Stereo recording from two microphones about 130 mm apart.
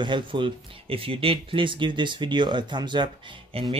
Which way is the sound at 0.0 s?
40° right (ahead or behind).